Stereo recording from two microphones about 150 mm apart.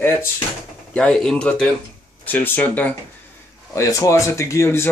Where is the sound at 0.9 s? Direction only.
5° left (ahead or behind).